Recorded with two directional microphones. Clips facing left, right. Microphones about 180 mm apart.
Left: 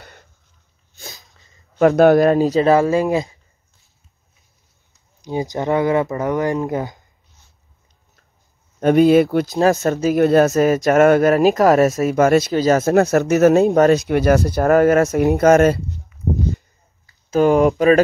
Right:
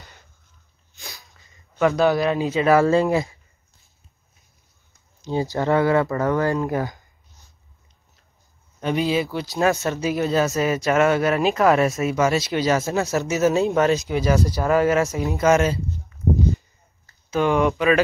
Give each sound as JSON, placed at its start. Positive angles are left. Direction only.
{"t": 0.0, "sound": "cough", "side_deg": 60}
{"t": 1.9, "sound": "speech", "side_deg": 55}
{"t": 2.8, "sound": "speech", "side_deg": 15}
{"t": 5.2, "sound": "speech", "side_deg": 15}
{"t": 8.7, "sound": "speech", "side_deg": 55}
{"t": 9.6, "sound": "speech", "side_deg": 40}
{"t": 10.5, "sound": "speech", "side_deg": 45}
{"t": 12.8, "sound": "speech", "side_deg": 60}
{"t": 17.3, "sound": "speech", "side_deg": 40}